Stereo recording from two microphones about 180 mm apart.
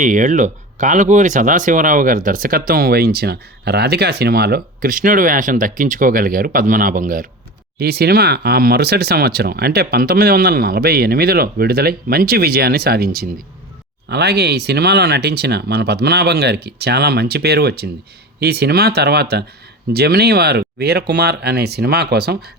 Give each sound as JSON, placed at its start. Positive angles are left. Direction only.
{"t": 0.0, "sound": "speech", "side_deg": -45}
{"t": 7.8, "sound": "speech", "side_deg": -60}